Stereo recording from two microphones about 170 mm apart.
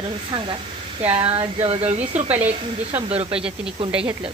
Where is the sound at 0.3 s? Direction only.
30° right (ahead or behind).